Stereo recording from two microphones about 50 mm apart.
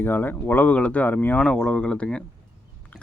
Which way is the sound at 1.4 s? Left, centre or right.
Centre.